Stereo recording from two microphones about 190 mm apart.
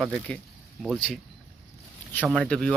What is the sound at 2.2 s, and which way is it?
Speech, 5° left (ahead or behind).